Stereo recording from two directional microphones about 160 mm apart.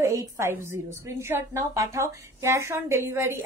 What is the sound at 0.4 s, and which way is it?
A woman's voice, 15° right (ahead or behind).